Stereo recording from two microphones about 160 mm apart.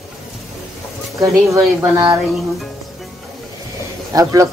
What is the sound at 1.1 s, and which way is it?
Speech, 20° right (ahead or behind).